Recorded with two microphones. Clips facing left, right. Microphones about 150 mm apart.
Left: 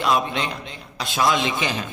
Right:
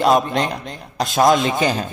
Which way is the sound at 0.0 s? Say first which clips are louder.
Right 6 dB; 40° right (ahead or behind).